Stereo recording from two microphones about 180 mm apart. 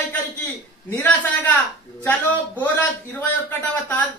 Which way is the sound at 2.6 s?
10° left (ahead or behind).